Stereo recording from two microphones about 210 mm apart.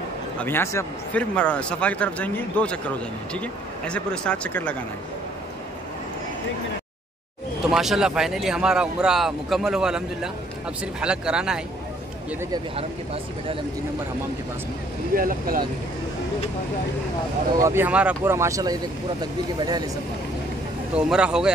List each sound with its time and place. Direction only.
0.4 s speech: 10° left (ahead or behind)
7.6 s speech: centre (ahead or behind)
12.7 s speech: 25° right (ahead or behind)
15.1 s speech: 40° right (ahead or behind)
17.6 s speech: 10° right (ahead or behind)
20.9 s speech: 5° right (ahead or behind)